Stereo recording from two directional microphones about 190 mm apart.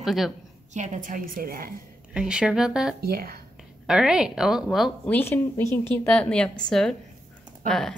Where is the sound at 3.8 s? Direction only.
5° right (ahead or behind).